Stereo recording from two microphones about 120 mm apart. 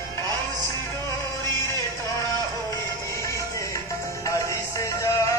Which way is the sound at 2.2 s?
25° left (ahead or behind).